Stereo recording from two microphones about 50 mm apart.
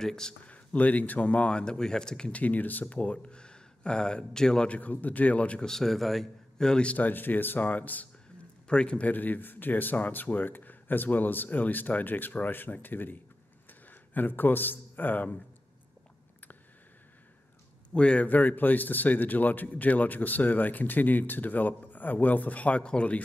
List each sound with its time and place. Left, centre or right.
0.0 s speech: centre
0.5 s speech: left; by 2.3 s centre
2.3 s speech: left; by 4.6 s centre
4.6 s a man's voice: left
5.6 s a man's voice: centre
6.7 s speech: left
7.0 s a man's voice: left
8.6 s speech: left
9.1 s a man's voice: left
17.9 s a man's voice: left